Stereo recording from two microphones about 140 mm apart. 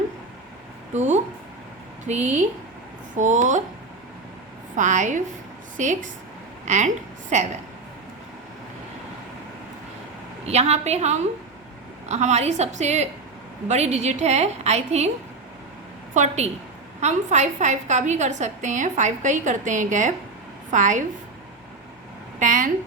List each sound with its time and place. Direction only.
0.9 s a woman's voice: 55° right (ahead or behind)
4.8 s a woman's voice: 60° right (ahead or behind)
10.4 s a woman's voice: 50° right (ahead or behind)
16.1 s a woman's voice: 55° right (ahead or behind)
22.4 s a sound: 65° right (ahead or behind)